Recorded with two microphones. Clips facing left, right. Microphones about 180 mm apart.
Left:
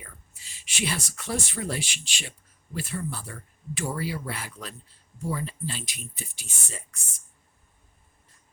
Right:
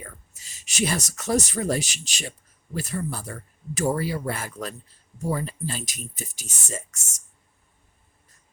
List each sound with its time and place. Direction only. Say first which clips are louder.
0.0 s speech: right 6 dB; 45° right (ahead or behind)